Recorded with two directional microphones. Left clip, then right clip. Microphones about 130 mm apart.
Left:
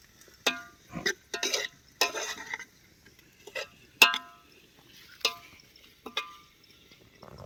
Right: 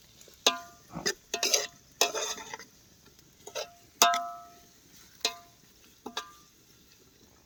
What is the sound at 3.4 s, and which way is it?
Clock, 30° right (ahead or behind).